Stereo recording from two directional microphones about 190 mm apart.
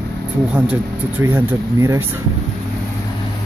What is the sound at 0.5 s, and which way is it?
Speech, 10° right (ahead or behind).